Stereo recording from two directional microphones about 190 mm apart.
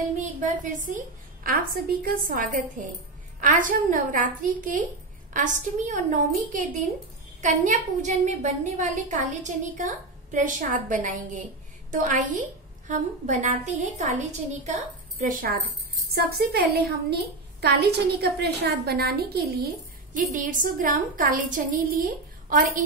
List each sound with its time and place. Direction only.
0.2 s a woman's voice: 40° right (ahead or behind)
7.4 s a woman's voice: 40° right (ahead or behind); by 19.7 s 55° right (ahead or behind)
20.3 s a woman's voice: 45° right (ahead or behind)